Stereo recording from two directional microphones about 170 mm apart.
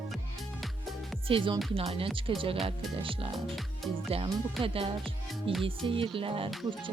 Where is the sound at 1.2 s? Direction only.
30° right (ahead or behind).